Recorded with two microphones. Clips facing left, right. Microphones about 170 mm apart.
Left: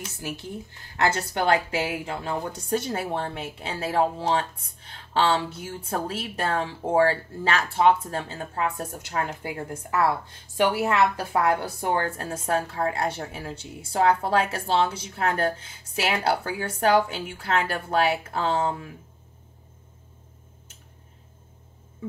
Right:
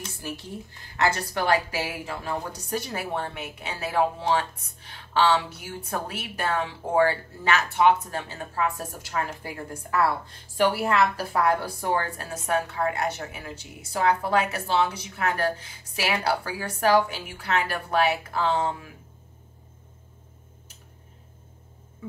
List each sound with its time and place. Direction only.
1.0 s a woman's voice: 25° left (ahead or behind)